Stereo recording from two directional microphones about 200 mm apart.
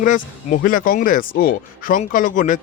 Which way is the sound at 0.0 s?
40° left (ahead or behind).